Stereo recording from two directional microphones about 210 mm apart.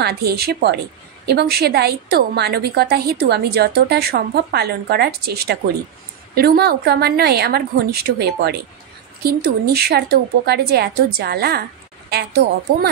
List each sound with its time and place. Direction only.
0.0 s a woman's voice: 50° right (ahead or behind)